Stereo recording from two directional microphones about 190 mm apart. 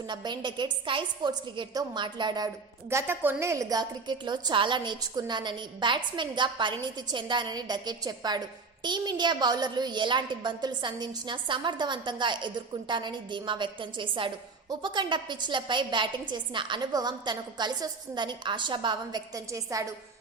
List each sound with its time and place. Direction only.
0.1 s a woman's voice: 25° right (ahead or behind)
2.9 s a woman's voice: 10° right (ahead or behind)